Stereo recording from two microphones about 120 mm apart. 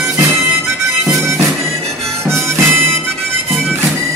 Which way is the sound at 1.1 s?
25° right (ahead or behind).